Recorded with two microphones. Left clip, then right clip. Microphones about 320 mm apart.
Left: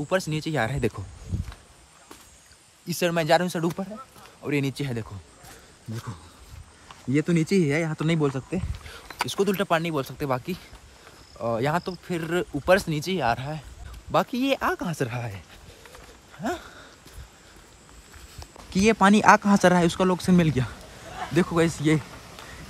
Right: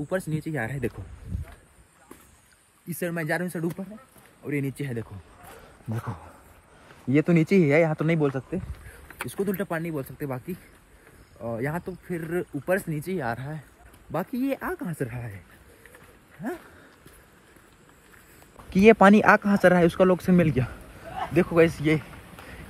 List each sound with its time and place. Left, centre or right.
0.4 s speech: centre
2.9 s speech: centre
7.1 s speech: centre
18.7 s speech: centre